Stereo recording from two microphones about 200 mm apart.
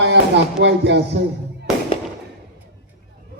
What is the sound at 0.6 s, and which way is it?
Music, 60° right (ahead or behind).